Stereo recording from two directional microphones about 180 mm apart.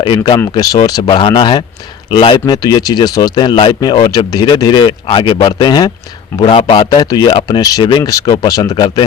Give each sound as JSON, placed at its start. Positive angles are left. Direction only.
{"t": 0.0, "sound": "speech", "side_deg": 30}